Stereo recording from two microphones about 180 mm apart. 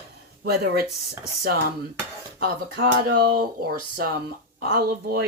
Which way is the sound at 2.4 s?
60° right (ahead or behind).